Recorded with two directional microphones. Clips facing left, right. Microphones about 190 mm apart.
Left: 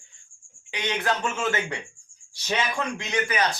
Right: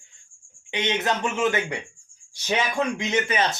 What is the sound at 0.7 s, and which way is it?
A man's voice, 20° right (ahead or behind).